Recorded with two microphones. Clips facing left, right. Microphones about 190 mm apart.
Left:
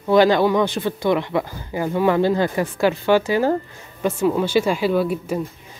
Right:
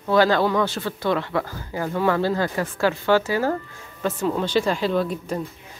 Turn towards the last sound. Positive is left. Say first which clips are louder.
# left 3 dB
turn(degrees=5)  # may be behind; listen again after turning